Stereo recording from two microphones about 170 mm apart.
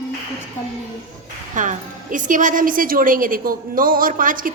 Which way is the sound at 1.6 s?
50° right (ahead or behind).